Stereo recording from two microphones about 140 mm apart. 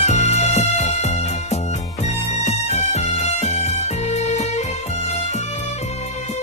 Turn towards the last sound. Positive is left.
turn(degrees=50)  # may be behind; listen again after turning